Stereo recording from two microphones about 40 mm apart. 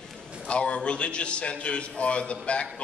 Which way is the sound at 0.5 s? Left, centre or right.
Left.